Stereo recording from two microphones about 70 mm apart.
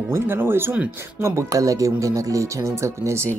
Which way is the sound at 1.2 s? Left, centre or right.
Right.